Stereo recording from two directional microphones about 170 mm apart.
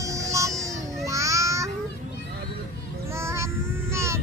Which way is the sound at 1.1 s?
20° right (ahead or behind).